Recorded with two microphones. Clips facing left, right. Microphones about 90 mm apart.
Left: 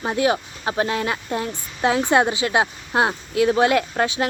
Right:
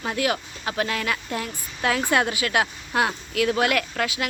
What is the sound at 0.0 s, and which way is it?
Speech, 25° left (ahead or behind).